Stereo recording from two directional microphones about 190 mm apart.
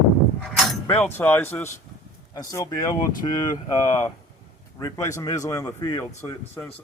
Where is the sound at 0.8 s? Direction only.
10° left (ahead or behind).